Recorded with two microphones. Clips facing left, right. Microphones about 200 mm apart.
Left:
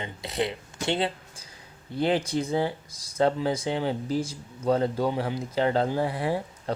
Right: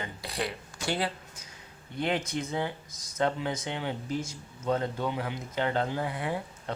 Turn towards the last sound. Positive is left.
turn(degrees=35)  # may be behind; listen again after turning